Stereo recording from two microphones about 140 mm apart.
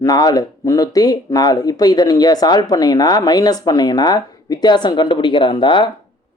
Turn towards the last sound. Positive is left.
turn(degrees=35)  # may be behind; listen again after turning